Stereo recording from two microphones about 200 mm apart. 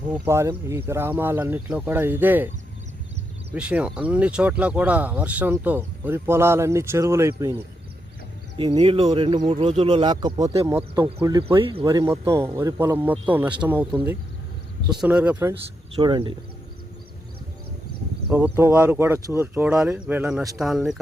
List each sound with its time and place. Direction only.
0.1 s speech: 15° right (ahead or behind)
3.5 s speech: 5° right (ahead or behind)
8.5 s speech: 25° right (ahead or behind)
16.0 s speech: 20° right (ahead or behind)
18.3 s speech: 10° right (ahead or behind)